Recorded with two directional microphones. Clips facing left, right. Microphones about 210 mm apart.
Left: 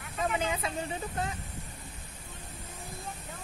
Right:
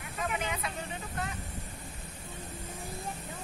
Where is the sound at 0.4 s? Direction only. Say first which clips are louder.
Left 3 dB; 30° left (ahead or behind).